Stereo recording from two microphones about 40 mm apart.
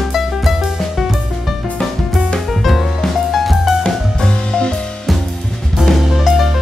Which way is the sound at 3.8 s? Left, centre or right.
Centre.